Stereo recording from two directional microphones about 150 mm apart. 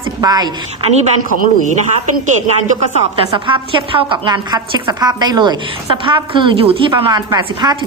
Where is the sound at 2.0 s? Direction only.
50° right (ahead or behind).